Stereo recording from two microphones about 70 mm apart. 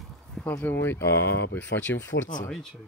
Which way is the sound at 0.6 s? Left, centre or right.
Left.